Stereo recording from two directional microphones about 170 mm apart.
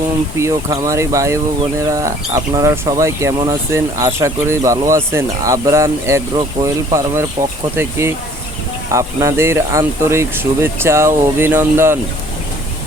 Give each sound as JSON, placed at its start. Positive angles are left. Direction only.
{"t": 0.3, "sound": "speech", "side_deg": -20}